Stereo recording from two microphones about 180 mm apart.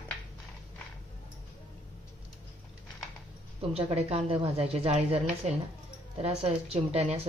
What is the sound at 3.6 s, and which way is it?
Speech, 30° right (ahead or behind).